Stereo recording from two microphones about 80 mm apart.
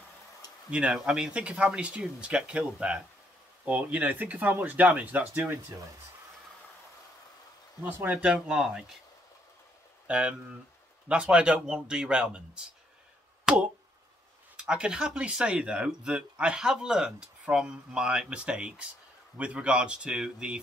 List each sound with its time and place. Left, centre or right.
0.7 s speech: centre
7.8 s speech: centre
10.0 s speech: centre
14.6 s speech: centre